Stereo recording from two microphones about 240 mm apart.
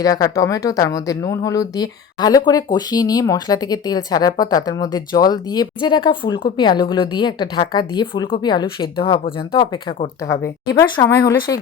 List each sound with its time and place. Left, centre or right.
0.0 s speech: centre